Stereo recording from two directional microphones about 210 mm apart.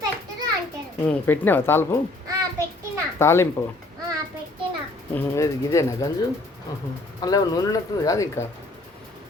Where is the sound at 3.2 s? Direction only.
10° left (ahead or behind).